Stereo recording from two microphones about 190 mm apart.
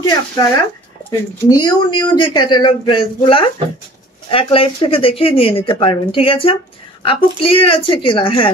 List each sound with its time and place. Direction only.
0.0 s speech: 20° left (ahead or behind)
1.5 s speech: 20° left (ahead or behind)